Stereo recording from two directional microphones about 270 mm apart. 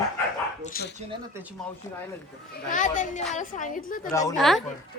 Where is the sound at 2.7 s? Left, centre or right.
Left.